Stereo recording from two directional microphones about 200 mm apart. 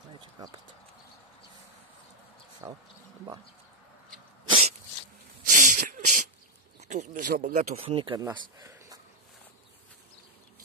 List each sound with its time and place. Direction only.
0.2 s a sound: 20° right (ahead or behind)
2.6 s speech: 15° right (ahead or behind)
4.5 s sneeze: 30° right (ahead or behind)
5.5 s a sound: 40° right (ahead or behind)
6.8 s speech: 35° right (ahead or behind)
7.8 s speech: 25° right (ahead or behind)